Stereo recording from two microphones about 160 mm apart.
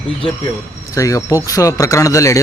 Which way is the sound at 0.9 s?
20° left (ahead or behind).